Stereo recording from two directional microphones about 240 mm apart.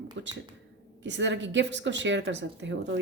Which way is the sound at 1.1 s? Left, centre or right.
Right.